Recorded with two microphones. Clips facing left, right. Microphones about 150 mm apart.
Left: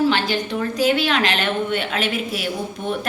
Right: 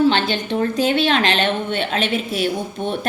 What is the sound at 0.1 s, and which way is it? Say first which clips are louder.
A woman's voice: right 1 dB; 25° right (ahead or behind).